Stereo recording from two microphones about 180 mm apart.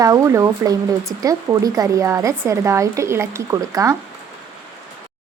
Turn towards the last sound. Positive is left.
turn(degrees=-20)  # may be behind; listen again after turning